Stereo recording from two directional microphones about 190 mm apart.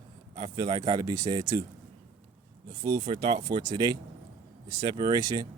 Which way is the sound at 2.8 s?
25° right (ahead or behind).